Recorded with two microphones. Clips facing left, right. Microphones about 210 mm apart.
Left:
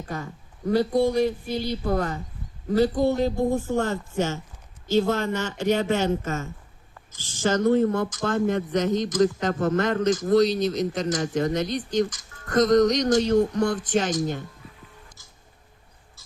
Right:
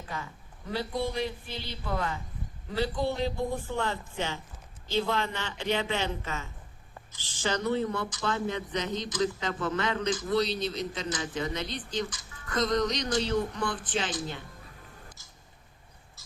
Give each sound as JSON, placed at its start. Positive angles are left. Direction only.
{"t": 0.0, "sound": "speech", "side_deg": 45}